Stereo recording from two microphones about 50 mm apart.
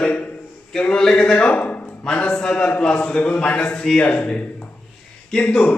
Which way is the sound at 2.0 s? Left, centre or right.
Centre.